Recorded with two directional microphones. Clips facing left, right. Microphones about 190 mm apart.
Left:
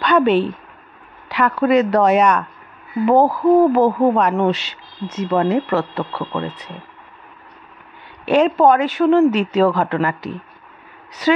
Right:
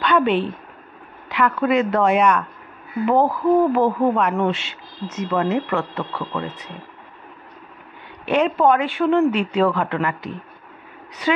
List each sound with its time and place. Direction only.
0.0 s a woman's voice: 40° left (ahead or behind)
8.3 s speech: 40° left (ahead or behind)